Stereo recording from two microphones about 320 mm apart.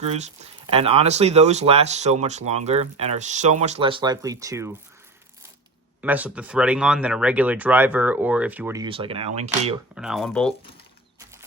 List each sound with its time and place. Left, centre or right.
0.7 s speech: centre
6.0 s speech: centre
9.9 s speech: centre